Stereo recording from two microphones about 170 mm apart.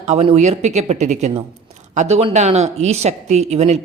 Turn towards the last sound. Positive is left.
turn(degrees=-40)  # may be behind; listen again after turning